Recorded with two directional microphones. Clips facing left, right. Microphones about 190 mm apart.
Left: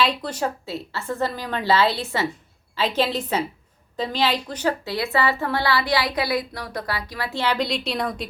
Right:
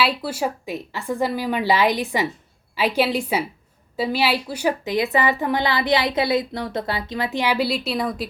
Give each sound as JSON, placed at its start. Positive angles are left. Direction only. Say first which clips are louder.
{"t": 0.0, "sound": "a woman's voice", "louder": "right 1 dB", "side_deg": -5}